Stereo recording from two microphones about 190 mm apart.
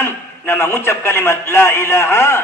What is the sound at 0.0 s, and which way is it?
A man's voice, 15° left (ahead or behind).